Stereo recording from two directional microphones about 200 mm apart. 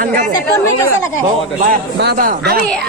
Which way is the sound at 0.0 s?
45° right (ahead or behind).